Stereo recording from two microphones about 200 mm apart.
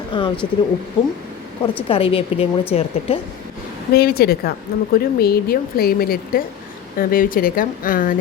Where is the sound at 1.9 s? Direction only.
30° left (ahead or behind).